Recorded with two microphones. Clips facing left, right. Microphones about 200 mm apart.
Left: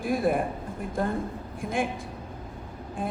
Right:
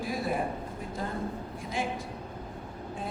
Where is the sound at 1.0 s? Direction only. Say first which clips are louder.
Left 8 dB; 55° left (ahead or behind).